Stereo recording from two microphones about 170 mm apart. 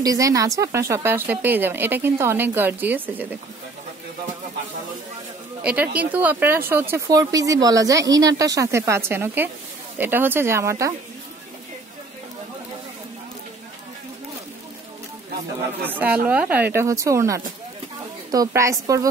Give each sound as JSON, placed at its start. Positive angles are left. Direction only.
{"t": 0.0, "sound": "speech", "side_deg": -20}
{"t": 5.6, "sound": "speech", "side_deg": -10}
{"t": 15.8, "sound": "speech", "side_deg": -10}